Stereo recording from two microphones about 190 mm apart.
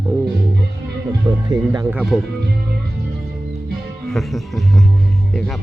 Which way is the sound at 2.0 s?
Centre (ahead or behind).